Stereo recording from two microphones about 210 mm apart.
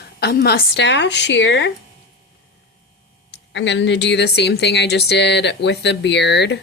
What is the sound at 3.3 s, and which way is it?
A woman's voice, 55° left (ahead or behind).